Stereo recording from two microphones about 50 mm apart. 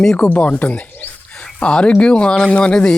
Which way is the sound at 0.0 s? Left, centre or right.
Centre.